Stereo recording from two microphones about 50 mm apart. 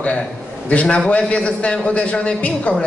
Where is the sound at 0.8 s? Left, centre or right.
Centre.